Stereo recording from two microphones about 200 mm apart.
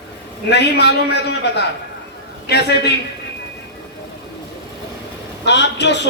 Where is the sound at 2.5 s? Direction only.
55° left (ahead or behind).